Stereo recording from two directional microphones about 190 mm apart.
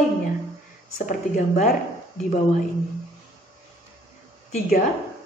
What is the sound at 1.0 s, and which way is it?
Speech, 45° left (ahead or behind).